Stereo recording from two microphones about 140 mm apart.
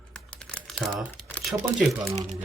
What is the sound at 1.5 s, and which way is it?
Speech, centre (ahead or behind).